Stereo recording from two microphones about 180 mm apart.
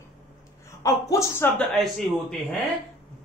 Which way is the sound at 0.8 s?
15° left (ahead or behind).